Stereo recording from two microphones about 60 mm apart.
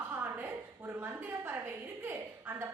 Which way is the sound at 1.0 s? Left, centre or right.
Right.